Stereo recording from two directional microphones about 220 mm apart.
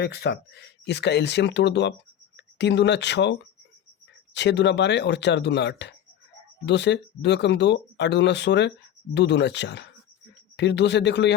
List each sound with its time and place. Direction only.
0.0 s speech: 50° left (ahead or behind)
4.4 s speech: 50° left (ahead or behind)